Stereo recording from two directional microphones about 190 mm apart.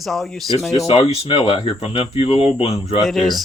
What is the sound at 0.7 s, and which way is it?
Speech, 35° left (ahead or behind).